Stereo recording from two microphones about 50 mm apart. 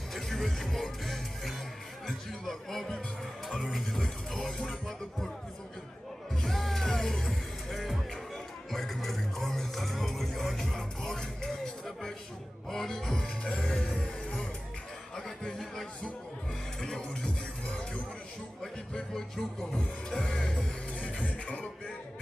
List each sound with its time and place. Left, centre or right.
0.1 s music: centre
6.3 s music: centre
15.1 s a sound: centre
16.8 s music: centre
18.6 s music: centre
21.3 s beatboxing: left